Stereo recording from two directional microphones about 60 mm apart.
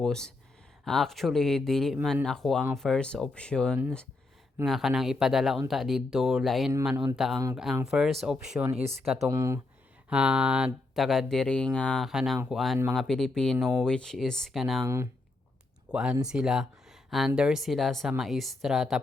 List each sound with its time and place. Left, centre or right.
0.0 s speech: centre
4.6 s a man's voice: centre
9.3 s speech: right
10.1 s a man's voice: centre
10.9 s speech: centre
11.4 s speech: centre
12.0 s speech: centre
12.9 s speech: centre
15.9 s a man's voice: centre
17.6 s speech: centre